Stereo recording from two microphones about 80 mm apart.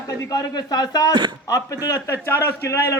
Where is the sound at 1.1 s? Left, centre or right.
Right.